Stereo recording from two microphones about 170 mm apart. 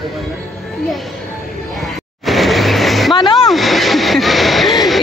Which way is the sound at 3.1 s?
30° left (ahead or behind).